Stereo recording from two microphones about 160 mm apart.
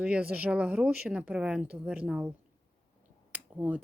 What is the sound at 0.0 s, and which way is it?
Speech, 10° right (ahead or behind).